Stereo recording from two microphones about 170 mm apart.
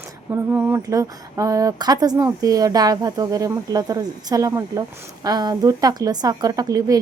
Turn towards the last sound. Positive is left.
turn(degrees=-20)  # may be behind; listen again after turning